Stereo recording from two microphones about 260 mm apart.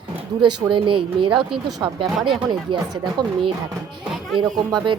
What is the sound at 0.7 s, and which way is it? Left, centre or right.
Speech, centre.